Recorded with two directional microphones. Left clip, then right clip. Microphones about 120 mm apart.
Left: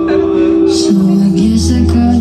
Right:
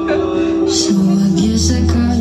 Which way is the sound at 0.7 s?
10° right (ahead or behind).